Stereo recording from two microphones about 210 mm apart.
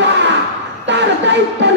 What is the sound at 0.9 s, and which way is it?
Speech, 55° right (ahead or behind).